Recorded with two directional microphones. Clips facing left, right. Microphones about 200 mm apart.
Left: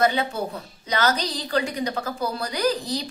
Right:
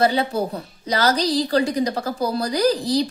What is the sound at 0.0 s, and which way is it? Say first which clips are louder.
A woman's voice: right 3 dB; 35° right (ahead or behind).